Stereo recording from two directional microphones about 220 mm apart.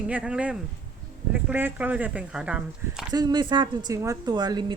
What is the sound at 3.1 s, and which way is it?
Speech, 20° right (ahead or behind).